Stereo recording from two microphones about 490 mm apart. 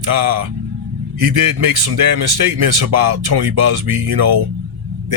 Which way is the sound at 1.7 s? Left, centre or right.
Right.